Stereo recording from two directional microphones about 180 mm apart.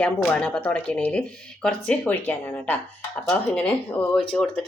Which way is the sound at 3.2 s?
5° left (ahead or behind).